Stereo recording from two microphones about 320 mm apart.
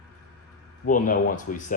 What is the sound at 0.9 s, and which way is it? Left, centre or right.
Speech, left.